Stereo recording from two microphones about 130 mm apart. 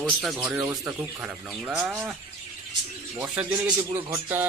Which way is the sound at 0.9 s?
10° right (ahead or behind).